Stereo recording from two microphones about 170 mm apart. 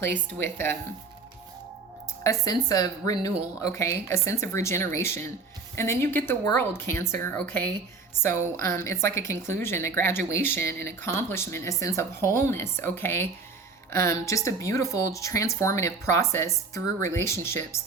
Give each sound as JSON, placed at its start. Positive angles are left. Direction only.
{"t": 0.1, "sound": "speech", "side_deg": 10}
{"t": 2.2, "sound": "a woman's voice", "side_deg": 20}
{"t": 8.8, "sound": "speech", "side_deg": 15}